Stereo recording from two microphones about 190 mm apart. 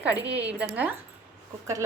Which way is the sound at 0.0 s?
10° right (ahead or behind).